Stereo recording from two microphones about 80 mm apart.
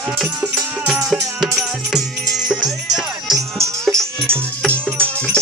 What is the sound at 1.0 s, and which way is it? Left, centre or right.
Music, centre.